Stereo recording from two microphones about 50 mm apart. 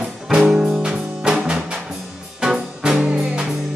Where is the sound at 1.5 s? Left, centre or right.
Right.